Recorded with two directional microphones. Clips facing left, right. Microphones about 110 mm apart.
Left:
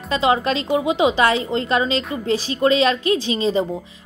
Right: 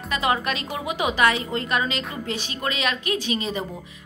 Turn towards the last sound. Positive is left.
turn(degrees=30)  # may be behind; listen again after turning